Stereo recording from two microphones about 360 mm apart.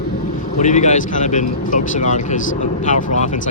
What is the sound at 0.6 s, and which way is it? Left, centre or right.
Speech, centre.